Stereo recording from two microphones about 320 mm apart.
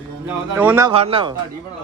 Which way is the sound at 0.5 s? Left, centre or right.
Centre.